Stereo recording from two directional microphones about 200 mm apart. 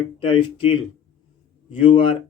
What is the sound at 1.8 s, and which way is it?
Speech, 25° left (ahead or behind).